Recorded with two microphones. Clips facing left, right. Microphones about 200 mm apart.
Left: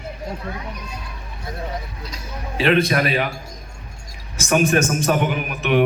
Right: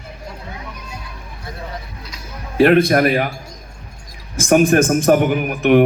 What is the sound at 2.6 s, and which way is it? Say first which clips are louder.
Speech: right 6 dB; 55° right (ahead or behind).